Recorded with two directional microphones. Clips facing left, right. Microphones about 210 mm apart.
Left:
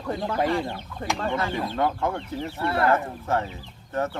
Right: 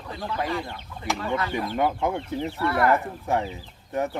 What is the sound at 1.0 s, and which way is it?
Speech, 50° left (ahead or behind).